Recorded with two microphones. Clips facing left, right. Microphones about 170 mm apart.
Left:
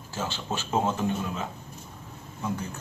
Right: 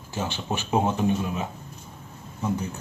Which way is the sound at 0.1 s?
15° right (ahead or behind).